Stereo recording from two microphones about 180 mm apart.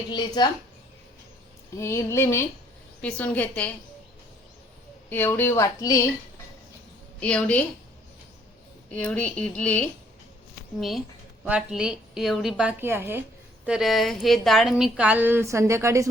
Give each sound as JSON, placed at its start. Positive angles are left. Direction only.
{"t": 0.1, "sound": "a woman's voice", "side_deg": 25}
{"t": 1.7, "sound": "a woman's voice", "side_deg": 15}
{"t": 5.0, "sound": "a woman's voice", "side_deg": 10}
{"t": 7.2, "sound": "a woman's voice", "side_deg": 5}
{"t": 8.9, "sound": "a woman's voice", "side_deg": 5}
{"t": 13.7, "sound": "speech", "side_deg": 0}